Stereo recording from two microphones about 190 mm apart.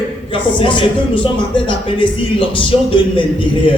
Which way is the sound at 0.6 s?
25° left (ahead or behind).